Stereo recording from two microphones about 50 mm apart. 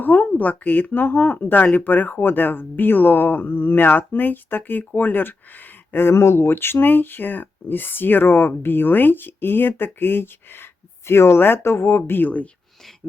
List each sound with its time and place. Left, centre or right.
0.0 s speech: left
6.0 s speech: left